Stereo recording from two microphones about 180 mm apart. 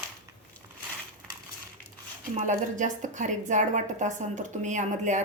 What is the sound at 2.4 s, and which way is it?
A woman's voice, 45° right (ahead or behind).